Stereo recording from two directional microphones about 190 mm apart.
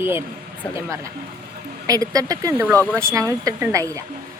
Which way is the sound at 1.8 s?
20° right (ahead or behind).